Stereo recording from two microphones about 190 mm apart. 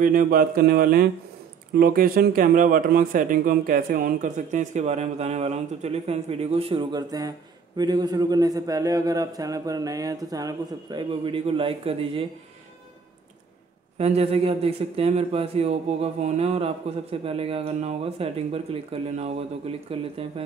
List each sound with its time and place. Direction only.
0.0 s speech: 45° right (ahead or behind); by 12.3 s 30° right (ahead or behind)
13.9 s speech: 35° right (ahead or behind)